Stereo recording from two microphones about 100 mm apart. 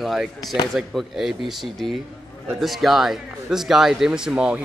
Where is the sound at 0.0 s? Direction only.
Centre (ahead or behind).